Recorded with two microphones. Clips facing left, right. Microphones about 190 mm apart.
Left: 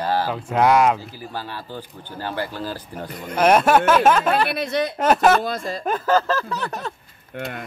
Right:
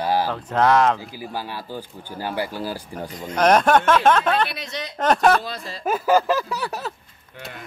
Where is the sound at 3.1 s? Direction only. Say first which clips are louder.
Even; 60° left (ahead or behind).